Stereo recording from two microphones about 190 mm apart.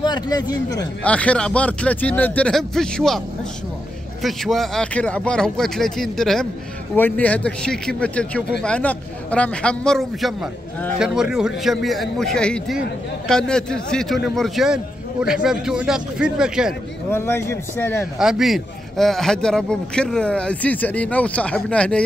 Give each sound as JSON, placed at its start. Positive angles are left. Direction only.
{"t": 0.0, "sound": "speech", "side_deg": 20}
{"t": 1.0, "sound": "speech", "side_deg": 5}
{"t": 4.2, "sound": "a man's voice", "side_deg": 0}
{"t": 17.1, "sound": "speech", "side_deg": 15}
{"t": 18.2, "sound": "a man's voice", "side_deg": 0}